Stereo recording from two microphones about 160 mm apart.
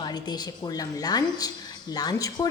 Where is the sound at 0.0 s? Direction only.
25° left (ahead or behind).